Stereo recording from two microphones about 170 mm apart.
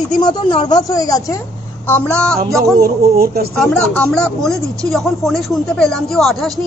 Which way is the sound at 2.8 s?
65° right (ahead or behind).